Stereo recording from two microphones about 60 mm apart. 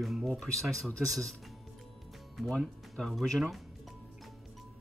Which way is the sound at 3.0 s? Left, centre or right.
Centre.